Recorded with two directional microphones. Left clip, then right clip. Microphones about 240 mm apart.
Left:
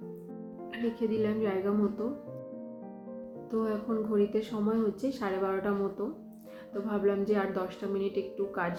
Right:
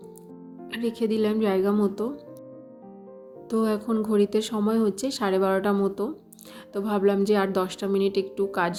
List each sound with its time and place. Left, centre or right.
0.7 s speech: right
3.5 s speech: right